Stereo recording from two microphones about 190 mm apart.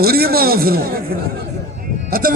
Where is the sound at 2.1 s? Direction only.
50° right (ahead or behind).